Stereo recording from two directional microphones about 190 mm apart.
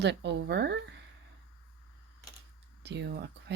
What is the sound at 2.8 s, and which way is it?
Speech, 65° right (ahead or behind).